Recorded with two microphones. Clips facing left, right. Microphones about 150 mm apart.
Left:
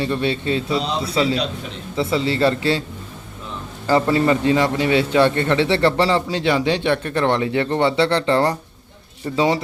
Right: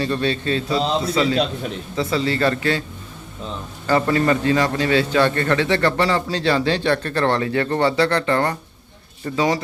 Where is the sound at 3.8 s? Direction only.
25° left (ahead or behind).